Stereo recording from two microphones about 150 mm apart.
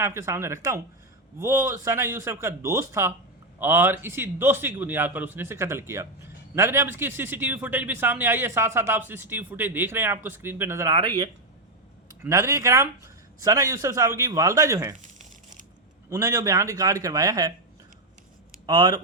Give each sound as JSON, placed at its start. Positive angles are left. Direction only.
{"t": 0.0, "sound": "a man's voice", "side_deg": -20}
{"t": 11.0, "sound": "speech", "side_deg": -30}
{"t": 12.2, "sound": "a man's voice", "side_deg": -20}
{"t": 14.9, "sound": "crumpling", "side_deg": -55}
{"t": 16.0, "sound": "a man's voice", "side_deg": -20}
{"t": 18.6, "sound": "speech", "side_deg": -30}